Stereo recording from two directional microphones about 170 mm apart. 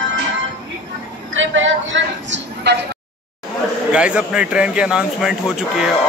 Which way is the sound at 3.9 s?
5° right (ahead or behind).